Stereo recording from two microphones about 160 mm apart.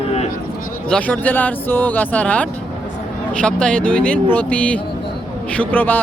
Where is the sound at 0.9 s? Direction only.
10° left (ahead or behind).